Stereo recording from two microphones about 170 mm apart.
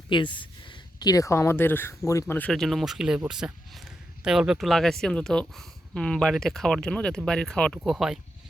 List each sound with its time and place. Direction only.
0.1 s speech: 30° left (ahead or behind); by 2.5 s 15° left (ahead or behind)
2.5 s speech: centre (ahead or behind)